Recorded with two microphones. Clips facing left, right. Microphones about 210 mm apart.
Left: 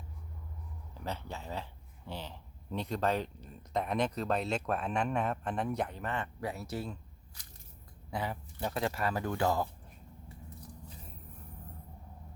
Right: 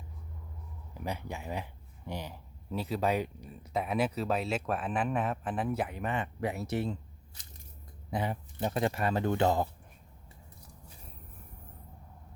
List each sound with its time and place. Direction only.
0.9 s speech: 10° right (ahead or behind)